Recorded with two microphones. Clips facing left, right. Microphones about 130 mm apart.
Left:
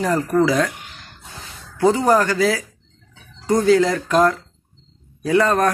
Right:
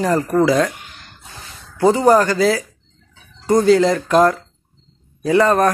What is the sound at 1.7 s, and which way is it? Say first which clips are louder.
Speech: right 3 dB; centre (ahead or behind).